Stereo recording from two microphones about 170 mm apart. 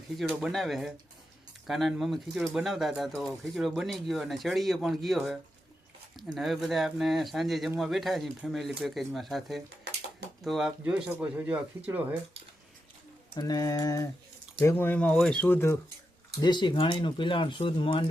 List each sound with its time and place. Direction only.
0.2 s speech: centre (ahead or behind)
13.3 s speech: 20° left (ahead or behind)
16.4 s speech: 25° left (ahead or behind)